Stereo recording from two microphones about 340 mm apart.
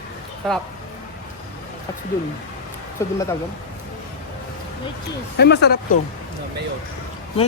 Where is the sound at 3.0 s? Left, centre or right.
Centre.